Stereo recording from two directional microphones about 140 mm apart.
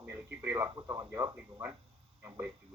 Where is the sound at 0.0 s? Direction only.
15° right (ahead or behind).